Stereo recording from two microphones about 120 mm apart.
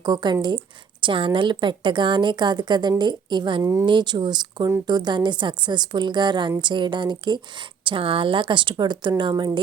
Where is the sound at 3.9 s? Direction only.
40° right (ahead or behind).